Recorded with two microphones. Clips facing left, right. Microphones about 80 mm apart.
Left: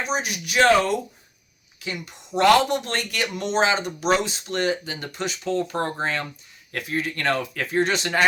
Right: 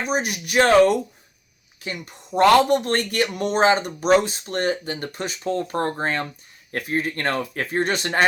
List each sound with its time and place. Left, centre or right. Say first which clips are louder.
0.0 s speech: right 2 dB; right
2.6 s speech: right 5 dB; right